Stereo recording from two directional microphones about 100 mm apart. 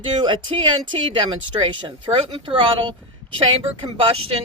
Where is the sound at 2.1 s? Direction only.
35° right (ahead or behind).